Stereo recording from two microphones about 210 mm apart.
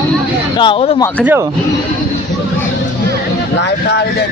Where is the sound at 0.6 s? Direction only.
25° left (ahead or behind).